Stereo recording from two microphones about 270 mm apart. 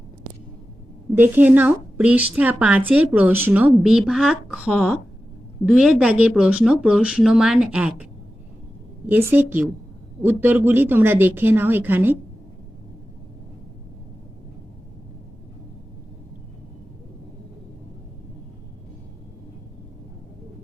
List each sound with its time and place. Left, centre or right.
1.1 s a woman's voice: centre
9.0 s speech: centre